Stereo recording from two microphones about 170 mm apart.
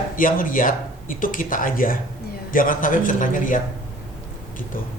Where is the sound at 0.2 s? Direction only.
55° left (ahead or behind).